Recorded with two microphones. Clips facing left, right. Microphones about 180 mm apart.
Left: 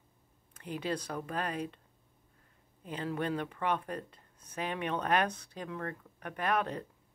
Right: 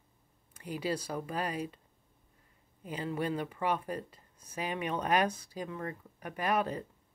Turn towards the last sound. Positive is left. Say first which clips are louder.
# right 1 dB
turn(degrees=-5)  # may be behind; listen again after turning